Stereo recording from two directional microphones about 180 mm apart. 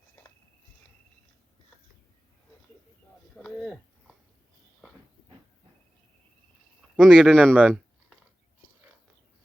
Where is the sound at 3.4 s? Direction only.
5° left (ahead or behind).